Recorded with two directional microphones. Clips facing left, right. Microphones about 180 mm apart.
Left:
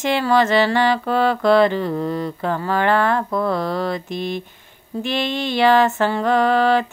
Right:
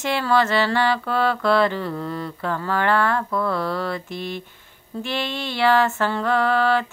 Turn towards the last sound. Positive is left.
turn(degrees=20)  # may be behind; listen again after turning